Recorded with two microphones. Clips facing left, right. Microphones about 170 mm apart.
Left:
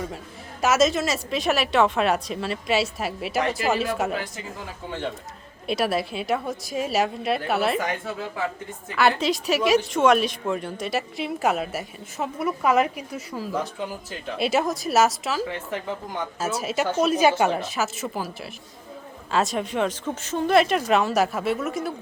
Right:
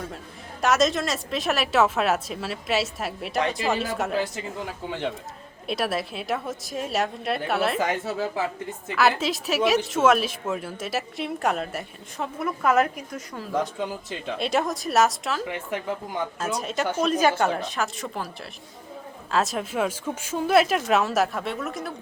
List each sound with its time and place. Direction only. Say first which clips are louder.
0.6 s speech: left 1 dB; centre (ahead or behind)
5.6 s speech: left 3 dB; centre (ahead or behind)
9.0 s speech: left 1 dB; centre (ahead or behind)
13.5 s speech: right 3 dB; 20° right (ahead or behind)
14.3 s speech: left 2 dB; 5° left (ahead or behind)
15.4 s speech: even; 15° right (ahead or behind)
16.6 s speech: left 3 dB; 5° left (ahead or behind)
19.3 s speech: left 1 dB; centre (ahead or behind)